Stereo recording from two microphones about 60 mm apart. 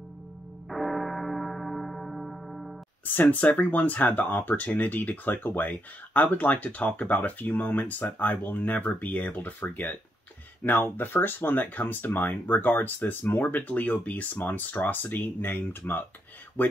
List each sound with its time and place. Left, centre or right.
0.7 s gong: centre
3.2 s speech: left